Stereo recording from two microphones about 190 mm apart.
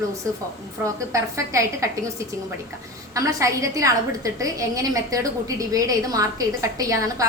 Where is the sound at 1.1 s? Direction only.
15° right (ahead or behind).